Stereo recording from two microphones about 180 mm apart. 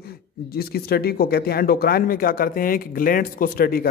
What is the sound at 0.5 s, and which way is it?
A man's voice, 60° left (ahead or behind).